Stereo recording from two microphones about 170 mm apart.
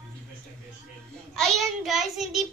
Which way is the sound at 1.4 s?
Centre (ahead or behind).